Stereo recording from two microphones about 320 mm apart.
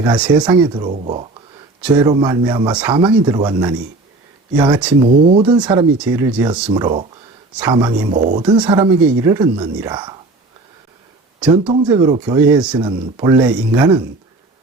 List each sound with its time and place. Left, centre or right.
0.0 s speech: centre
1.8 s speech: centre
11.3 s speech: centre
11.9 s speech: centre